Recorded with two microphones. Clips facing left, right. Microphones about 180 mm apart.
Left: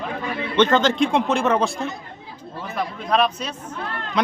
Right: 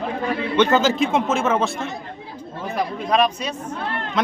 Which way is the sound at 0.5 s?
5° right (ahead or behind).